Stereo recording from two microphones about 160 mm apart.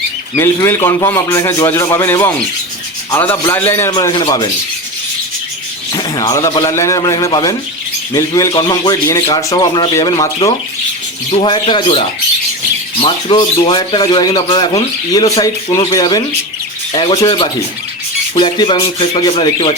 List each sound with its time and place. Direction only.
0.3 s a man's voice: 15° left (ahead or behind)
3.5 s a man's voice: 15° left (ahead or behind)
3.9 s speech: 30° left (ahead or behind)
5.9 s speech: 25° left (ahead or behind)
11.3 s speech: 30° left (ahead or behind)